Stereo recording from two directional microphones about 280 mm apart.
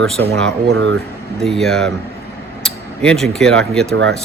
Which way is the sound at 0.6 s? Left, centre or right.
Right.